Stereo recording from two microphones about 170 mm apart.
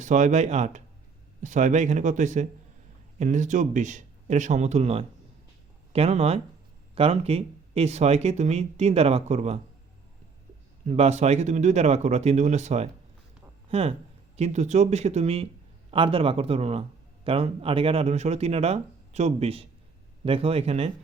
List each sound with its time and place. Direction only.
0.0 s speech: 45° right (ahead or behind)
10.8 s speech: 40° right (ahead or behind)